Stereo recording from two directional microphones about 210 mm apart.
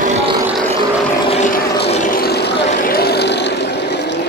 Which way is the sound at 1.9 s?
40° left (ahead or behind).